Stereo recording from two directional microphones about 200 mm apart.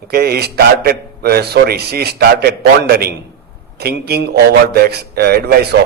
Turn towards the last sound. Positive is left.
turn(degrees=-50)  # may be behind; listen again after turning